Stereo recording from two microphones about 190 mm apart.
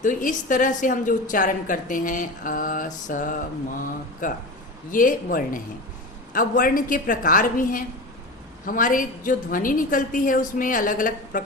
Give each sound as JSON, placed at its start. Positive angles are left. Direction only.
{"t": 0.0, "sound": "a woman's voice", "side_deg": 45}